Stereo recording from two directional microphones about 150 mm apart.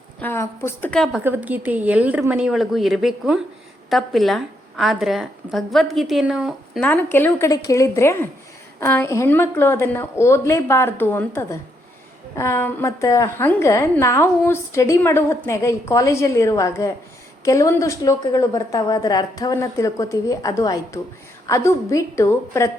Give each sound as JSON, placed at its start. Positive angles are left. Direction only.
{"t": 0.2, "sound": "a woman's voice", "side_deg": 15}
{"t": 0.9, "sound": "a woman's voice", "side_deg": 5}
{"t": 1.2, "sound": "a woman's voice", "side_deg": -10}
{"t": 6.8, "sound": "a woman's voice", "side_deg": 10}